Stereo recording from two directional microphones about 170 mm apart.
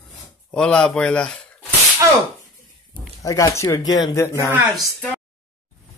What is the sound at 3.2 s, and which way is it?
Speech, 20° left (ahead or behind).